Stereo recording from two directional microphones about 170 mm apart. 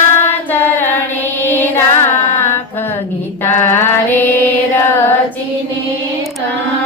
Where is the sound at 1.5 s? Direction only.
10° left (ahead or behind).